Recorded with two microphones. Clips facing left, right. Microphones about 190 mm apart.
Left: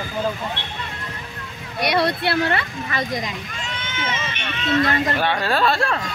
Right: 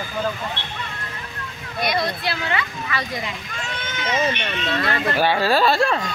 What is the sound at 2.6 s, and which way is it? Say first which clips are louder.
Speech: left 1 dB; 40° left (ahead or behind).